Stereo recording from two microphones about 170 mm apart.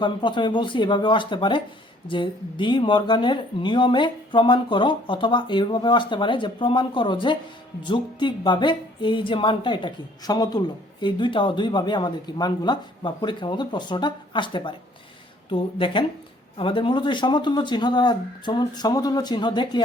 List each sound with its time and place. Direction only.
0.0 s speech: 25° left (ahead or behind)